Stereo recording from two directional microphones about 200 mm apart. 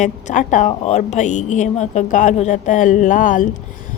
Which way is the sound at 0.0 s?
40° left (ahead or behind).